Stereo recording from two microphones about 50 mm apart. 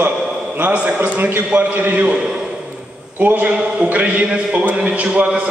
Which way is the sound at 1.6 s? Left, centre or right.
Right.